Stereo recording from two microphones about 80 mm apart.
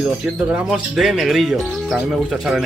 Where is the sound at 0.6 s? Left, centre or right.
Centre.